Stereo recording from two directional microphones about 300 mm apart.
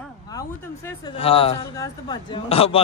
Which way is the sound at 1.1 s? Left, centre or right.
Centre.